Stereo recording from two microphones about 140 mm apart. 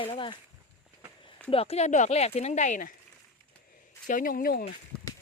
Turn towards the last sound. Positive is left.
turn(degrees=90)